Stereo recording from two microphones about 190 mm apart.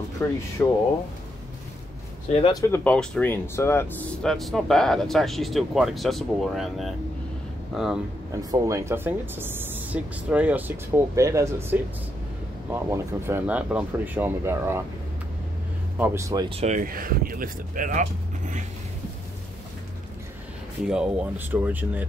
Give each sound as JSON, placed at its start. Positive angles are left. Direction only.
{"t": 0.2, "sound": "speech", "side_deg": 10}
{"t": 2.3, "sound": "speech", "side_deg": 35}
{"t": 2.7, "sound": "speech", "side_deg": 5}
{"t": 8.3, "sound": "speech", "side_deg": -20}
{"t": 16.0, "sound": "speech", "side_deg": -15}
{"t": 16.4, "sound": "speech", "side_deg": -35}
{"t": 20.8, "sound": "speech", "side_deg": -5}